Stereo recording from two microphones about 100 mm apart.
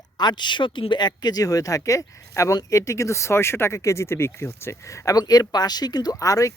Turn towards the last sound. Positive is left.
turn(degrees=35)  # may be behind; listen again after turning